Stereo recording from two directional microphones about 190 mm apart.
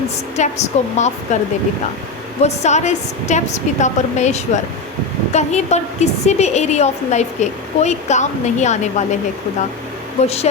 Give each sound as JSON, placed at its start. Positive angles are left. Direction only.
{"t": 0.3, "sound": "a woman's voice", "side_deg": 35}
{"t": 2.4, "sound": "a woman's voice", "side_deg": 35}
{"t": 10.2, "sound": "a woman's voice", "side_deg": 35}